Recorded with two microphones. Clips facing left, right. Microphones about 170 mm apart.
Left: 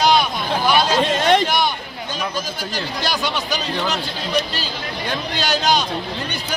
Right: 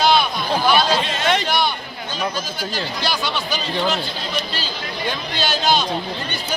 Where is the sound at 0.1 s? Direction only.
15° left (ahead or behind).